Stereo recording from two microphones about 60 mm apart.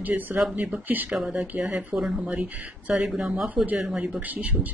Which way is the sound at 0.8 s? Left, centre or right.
Right.